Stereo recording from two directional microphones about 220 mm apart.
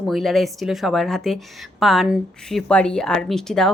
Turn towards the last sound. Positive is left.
turn(degrees=0)  # may be behind; listen again after turning